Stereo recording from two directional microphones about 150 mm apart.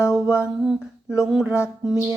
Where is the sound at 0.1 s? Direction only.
5° right (ahead or behind).